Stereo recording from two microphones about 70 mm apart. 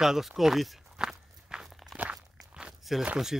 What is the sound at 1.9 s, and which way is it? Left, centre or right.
Crunch, right.